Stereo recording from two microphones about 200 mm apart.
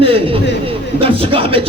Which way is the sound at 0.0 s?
30° right (ahead or behind).